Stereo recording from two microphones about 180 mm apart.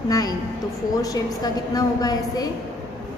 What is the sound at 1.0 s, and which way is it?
A woman's voice, 20° left (ahead or behind).